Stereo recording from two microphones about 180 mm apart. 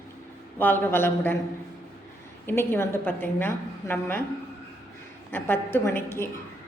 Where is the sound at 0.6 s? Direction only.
10° left (ahead or behind).